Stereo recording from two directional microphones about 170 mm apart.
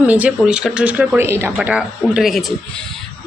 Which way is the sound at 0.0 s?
10° right (ahead or behind).